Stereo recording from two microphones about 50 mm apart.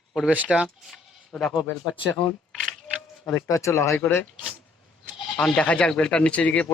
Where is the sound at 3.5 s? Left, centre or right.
Left.